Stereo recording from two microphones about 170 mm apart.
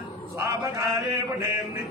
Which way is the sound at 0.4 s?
20° right (ahead or behind).